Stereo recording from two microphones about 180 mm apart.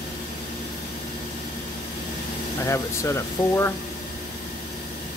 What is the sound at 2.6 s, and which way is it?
Speech, 15° left (ahead or behind).